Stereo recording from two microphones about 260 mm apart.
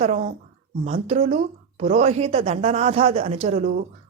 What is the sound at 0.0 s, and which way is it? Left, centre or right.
A woman's voice, right.